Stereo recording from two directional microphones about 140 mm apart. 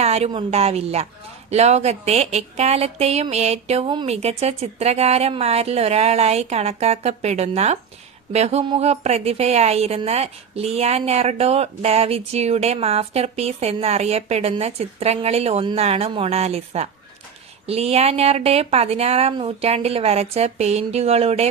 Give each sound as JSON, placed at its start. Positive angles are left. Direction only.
{"t": 0.0, "sound": "speech", "side_deg": -45}